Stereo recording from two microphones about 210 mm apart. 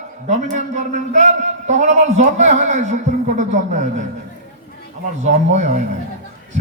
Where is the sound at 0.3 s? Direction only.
35° right (ahead or behind).